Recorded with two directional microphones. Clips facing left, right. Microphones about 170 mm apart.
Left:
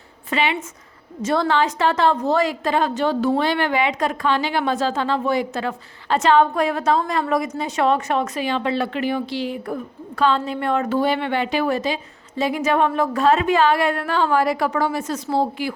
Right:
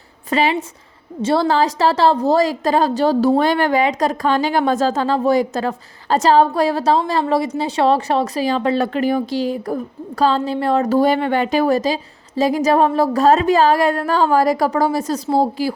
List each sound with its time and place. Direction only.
0.3 s a woman's voice: 40° right (ahead or behind)